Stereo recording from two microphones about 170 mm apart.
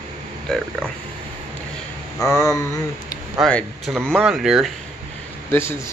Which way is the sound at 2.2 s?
15° left (ahead or behind).